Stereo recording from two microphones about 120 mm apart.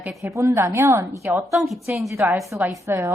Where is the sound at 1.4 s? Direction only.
Centre (ahead or behind).